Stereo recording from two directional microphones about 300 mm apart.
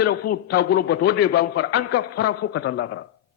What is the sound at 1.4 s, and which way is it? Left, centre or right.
Speech, left.